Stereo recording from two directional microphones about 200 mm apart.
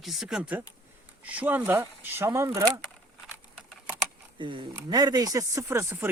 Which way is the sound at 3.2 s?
Centre (ahead or behind).